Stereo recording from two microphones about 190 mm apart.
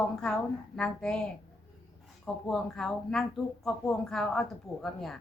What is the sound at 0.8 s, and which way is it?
Speech, 5° left (ahead or behind).